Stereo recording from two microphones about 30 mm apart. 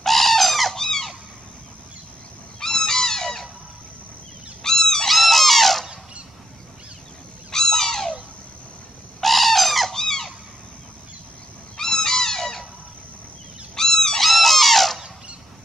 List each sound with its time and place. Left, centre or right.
0.0 s bird: centre
0.7 s squeak: centre
2.6 s a sound: centre
4.6 s a sound: centre
5.0 s squeak: centre
7.5 s goose: centre
9.2 s bird: centre
9.9 s squeak: centre
11.7 s a sound: centre
13.7 s goose: centre
14.2 s music: centre